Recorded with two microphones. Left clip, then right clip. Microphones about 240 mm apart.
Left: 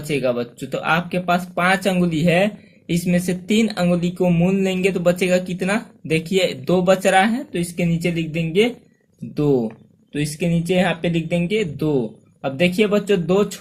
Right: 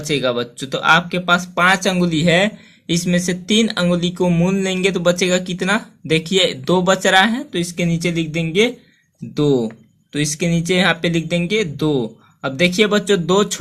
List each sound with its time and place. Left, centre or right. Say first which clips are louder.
0.1 s speech: right 2 dB; right